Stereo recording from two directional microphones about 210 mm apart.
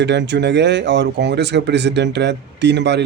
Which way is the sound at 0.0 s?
55° right (ahead or behind).